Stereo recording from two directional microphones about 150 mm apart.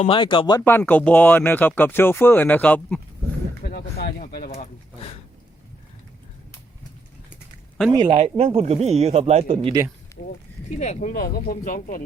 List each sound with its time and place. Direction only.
0.0 s speech: 35° left (ahead or behind)
0.6 s speech: 10° left (ahead or behind)
3.7 s speech: 90° left; by 4.5 s 75° left (ahead or behind)
8.0 s speech: 45° right (ahead or behind)
10.2 s speech: 75° left (ahead or behind)
10.8 s speech: 50° left (ahead or behind)
11.2 s speech: 75° left (ahead or behind)